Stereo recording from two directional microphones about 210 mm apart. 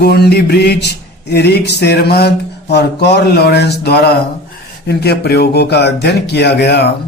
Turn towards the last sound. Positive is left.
turn(degrees=50)  # may be behind; listen again after turning